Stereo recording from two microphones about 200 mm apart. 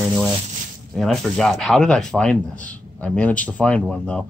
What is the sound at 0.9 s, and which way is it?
Speech, centre (ahead or behind).